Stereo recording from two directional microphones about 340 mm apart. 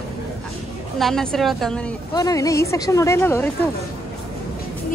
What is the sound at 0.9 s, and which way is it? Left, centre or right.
A woman's voice, centre.